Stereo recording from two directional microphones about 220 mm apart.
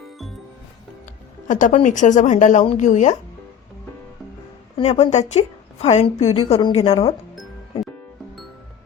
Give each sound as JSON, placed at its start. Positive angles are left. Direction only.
{"t": 1.5, "sound": "a woman's voice", "side_deg": 35}
{"t": 4.8, "sound": "a woman's voice", "side_deg": 30}